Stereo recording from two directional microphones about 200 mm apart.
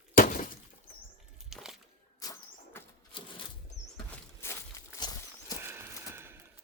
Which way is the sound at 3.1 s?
25° left (ahead or behind).